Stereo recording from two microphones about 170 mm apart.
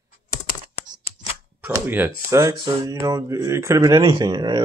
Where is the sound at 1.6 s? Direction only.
10° right (ahead or behind).